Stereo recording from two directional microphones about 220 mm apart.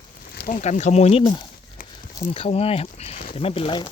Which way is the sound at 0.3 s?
35° left (ahead or behind).